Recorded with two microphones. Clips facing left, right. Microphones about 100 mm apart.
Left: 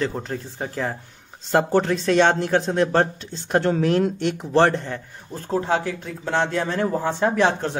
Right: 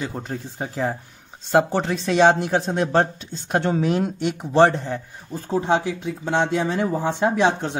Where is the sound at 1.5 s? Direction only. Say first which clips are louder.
Even; centre (ahead or behind).